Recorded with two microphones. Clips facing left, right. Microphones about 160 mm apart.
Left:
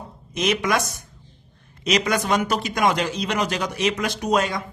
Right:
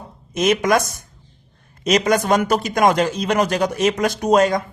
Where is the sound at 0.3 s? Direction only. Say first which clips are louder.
Right 5 dB; 45° right (ahead or behind).